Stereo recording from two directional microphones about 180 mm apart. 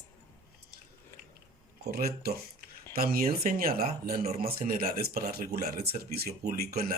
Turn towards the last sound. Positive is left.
turn(degrees=-55)  # may be behind; listen again after turning